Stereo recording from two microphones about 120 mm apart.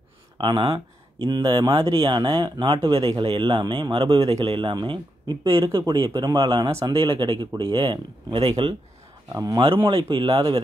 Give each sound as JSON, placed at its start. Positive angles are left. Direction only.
{"t": 0.4, "sound": "speech", "side_deg": -40}
{"t": 2.9, "sound": "speech", "side_deg": -45}
{"t": 9.8, "sound": "speech", "side_deg": -45}